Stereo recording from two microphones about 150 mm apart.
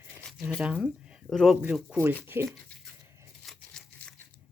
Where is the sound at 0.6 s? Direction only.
5° right (ahead or behind).